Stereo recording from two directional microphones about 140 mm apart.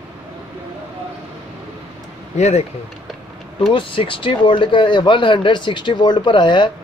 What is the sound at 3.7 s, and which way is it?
Speech, 40° left (ahead or behind).